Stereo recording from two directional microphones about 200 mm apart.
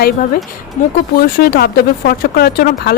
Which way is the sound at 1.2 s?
45° left (ahead or behind).